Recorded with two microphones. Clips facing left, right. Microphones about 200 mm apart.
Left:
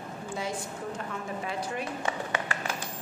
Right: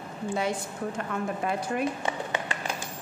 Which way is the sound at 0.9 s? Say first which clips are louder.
Right 4 dB; 55° right (ahead or behind).